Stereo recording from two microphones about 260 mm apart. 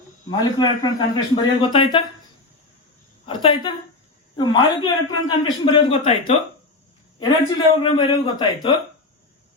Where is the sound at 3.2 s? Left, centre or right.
Centre.